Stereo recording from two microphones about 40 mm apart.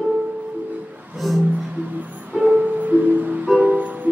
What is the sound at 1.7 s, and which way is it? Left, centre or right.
Music, right.